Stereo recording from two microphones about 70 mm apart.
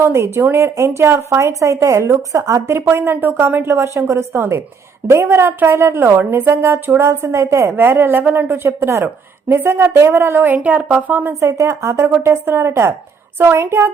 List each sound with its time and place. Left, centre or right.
0.0 s a woman's voice: right
2.9 s a woman's voice: right
11.3 s a woman's voice: right